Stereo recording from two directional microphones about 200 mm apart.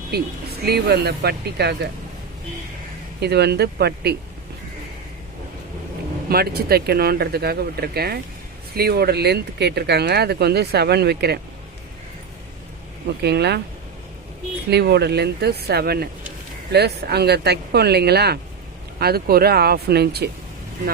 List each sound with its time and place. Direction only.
0.6 s speech: 55° right (ahead or behind)
3.2 s speech: 55° right (ahead or behind)
6.2 s speech: 50° right (ahead or behind)
13.2 s speech: 55° right (ahead or behind)
14.7 s speech: 55° right (ahead or behind)